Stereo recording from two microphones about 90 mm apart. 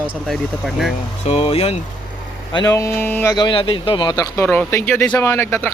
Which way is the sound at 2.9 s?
20° left (ahead or behind).